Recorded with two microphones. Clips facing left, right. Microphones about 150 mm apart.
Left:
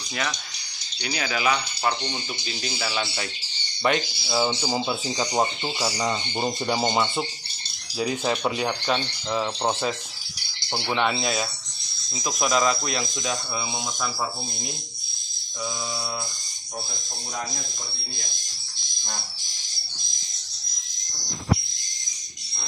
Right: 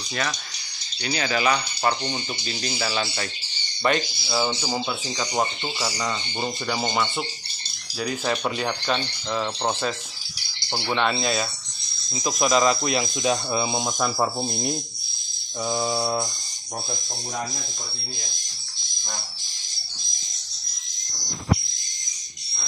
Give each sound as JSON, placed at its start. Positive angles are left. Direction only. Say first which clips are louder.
{"t": 1.0, "sound": "speech", "louder": "right 2 dB", "side_deg": 5}
{"t": 13.2, "sound": "speech", "louder": "right 6 dB", "side_deg": -25}
{"t": 15.7, "sound": "mantra", "louder": "right 10 dB", "side_deg": -50}